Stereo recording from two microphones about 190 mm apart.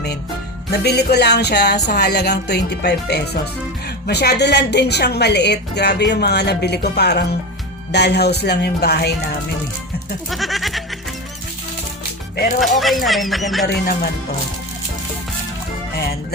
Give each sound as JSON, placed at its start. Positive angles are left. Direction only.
{"t": 0.7, "sound": "a woman's voice", "side_deg": 60}
{"t": 10.2, "sound": "goat", "side_deg": 0}
{"t": 12.5, "sound": "speech", "side_deg": 0}